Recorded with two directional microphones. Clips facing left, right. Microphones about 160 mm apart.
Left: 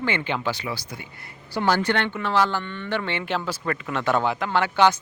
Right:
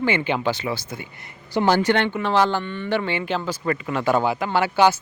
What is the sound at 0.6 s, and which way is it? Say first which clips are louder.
Speech: right 4 dB; 25° right (ahead or behind).